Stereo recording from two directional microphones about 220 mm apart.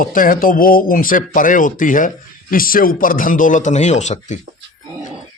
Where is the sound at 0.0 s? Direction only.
40° left (ahead or behind).